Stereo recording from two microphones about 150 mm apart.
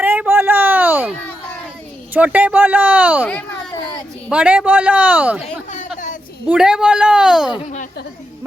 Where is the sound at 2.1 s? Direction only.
10° right (ahead or behind).